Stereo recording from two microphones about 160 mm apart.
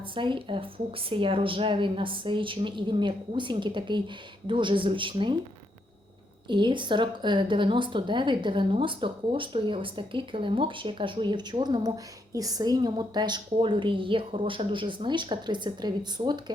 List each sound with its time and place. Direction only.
0.0 s a woman's voice: 30° right (ahead or behind)
6.5 s a woman's voice: 30° right (ahead or behind)